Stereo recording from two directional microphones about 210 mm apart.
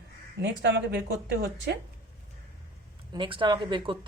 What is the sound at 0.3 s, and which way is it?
Speech, 55° right (ahead or behind).